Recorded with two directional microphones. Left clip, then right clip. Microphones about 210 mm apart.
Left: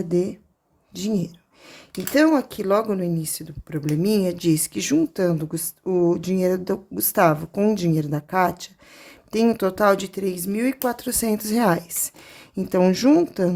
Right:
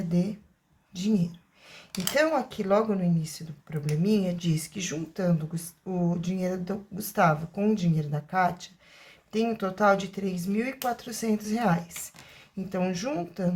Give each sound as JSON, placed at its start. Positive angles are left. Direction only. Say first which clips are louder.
{"t": 0.1, "sound": "speech", "louder": "left 11 dB", "side_deg": 50}